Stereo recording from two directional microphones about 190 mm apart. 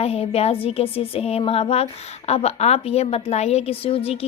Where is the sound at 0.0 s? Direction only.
30° left (ahead or behind).